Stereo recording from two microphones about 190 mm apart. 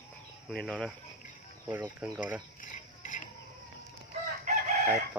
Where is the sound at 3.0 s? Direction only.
40° left (ahead or behind).